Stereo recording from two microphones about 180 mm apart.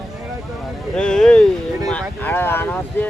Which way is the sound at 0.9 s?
5° left (ahead or behind).